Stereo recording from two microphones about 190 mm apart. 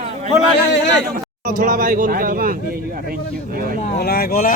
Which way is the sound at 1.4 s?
45° right (ahead or behind).